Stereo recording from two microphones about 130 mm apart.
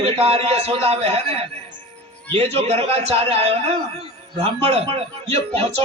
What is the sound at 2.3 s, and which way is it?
A man's voice, 50° right (ahead or behind).